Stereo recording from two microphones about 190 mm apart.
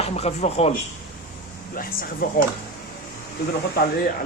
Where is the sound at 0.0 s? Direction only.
35° left (ahead or behind).